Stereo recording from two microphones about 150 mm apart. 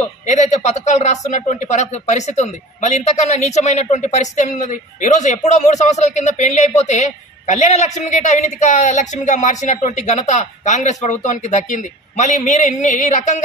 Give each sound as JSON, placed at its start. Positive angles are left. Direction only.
{"t": 0.3, "sound": "a man's voice", "side_deg": 50}